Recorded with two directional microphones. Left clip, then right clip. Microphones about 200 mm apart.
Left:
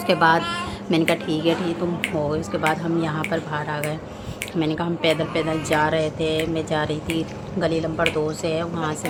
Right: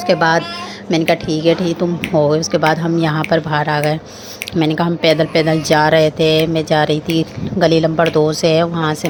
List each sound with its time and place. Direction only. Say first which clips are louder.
0.1 s a child's voice: right 4 dB; 20° right (ahead or behind)